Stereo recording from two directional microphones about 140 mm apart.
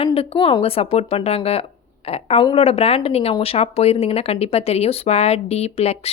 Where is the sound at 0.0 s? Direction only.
40° left (ahead or behind).